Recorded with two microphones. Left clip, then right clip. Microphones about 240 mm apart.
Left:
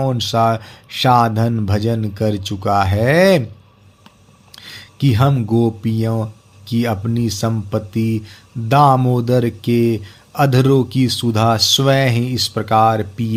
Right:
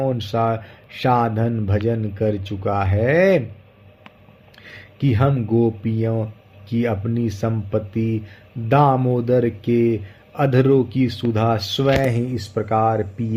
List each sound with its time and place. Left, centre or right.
0.0 s speech: left
4.5 s speech: left